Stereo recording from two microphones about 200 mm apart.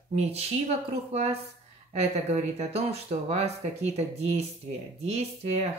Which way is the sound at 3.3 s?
35° right (ahead or behind).